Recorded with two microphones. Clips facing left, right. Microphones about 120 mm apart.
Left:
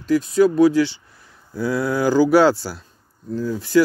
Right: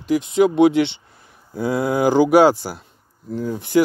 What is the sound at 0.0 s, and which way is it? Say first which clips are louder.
A man's voice: left 1 dB; 15° right (ahead or behind).